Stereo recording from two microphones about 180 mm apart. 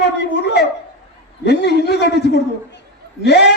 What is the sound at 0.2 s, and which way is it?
Speech, 70° left (ahead or behind).